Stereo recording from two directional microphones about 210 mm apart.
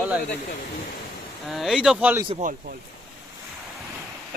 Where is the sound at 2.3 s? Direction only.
35° right (ahead or behind).